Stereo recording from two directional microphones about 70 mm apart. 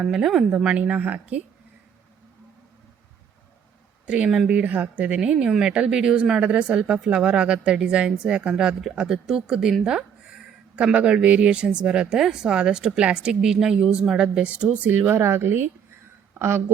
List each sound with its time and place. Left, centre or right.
0.0 s speech: centre
0.5 s speech: centre
4.0 s speech: centre
9.8 s a sound: centre
10.9 s speech: centre; by 16.7 s right